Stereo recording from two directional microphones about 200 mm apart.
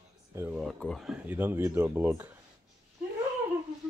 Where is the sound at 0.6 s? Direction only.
Centre (ahead or behind).